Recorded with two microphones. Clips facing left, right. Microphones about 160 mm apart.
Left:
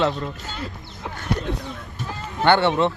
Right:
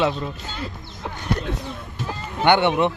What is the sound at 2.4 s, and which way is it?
Speech, 15° right (ahead or behind).